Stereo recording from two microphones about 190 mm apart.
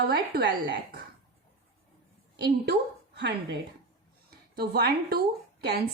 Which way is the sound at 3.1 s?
65° right (ahead or behind).